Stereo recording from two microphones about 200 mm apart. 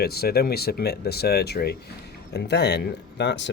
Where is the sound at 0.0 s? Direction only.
50° left (ahead or behind).